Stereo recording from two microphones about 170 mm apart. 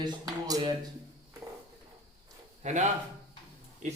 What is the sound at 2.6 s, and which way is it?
Speech, 45° right (ahead or behind).